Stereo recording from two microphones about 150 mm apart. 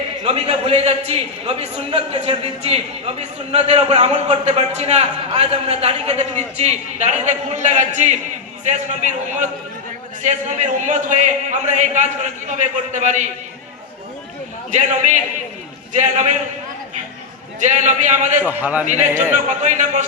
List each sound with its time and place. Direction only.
0.3 s a man's voice: 45° right (ahead or behind)
14.7 s a man's voice: 50° right (ahead or behind)
17.6 s a man's voice: 55° right (ahead or behind)
18.4 s a man's voice: 10° right (ahead or behind)
19.3 s a man's voice: 55° right (ahead or behind)